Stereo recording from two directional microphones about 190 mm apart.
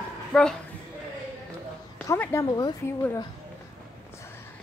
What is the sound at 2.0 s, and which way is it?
Speech, 10° left (ahead or behind).